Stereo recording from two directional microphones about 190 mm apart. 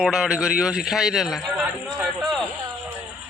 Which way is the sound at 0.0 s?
5° right (ahead or behind).